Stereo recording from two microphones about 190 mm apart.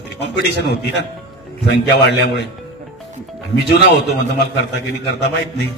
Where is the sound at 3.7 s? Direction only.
60° left (ahead or behind).